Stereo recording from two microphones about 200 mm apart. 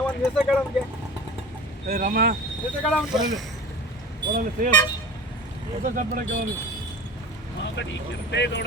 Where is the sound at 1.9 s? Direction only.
45° right (ahead or behind).